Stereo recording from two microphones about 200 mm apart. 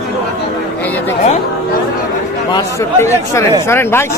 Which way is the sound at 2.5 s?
15° left (ahead or behind).